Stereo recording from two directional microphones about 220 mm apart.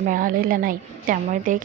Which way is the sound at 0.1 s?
40° right (ahead or behind).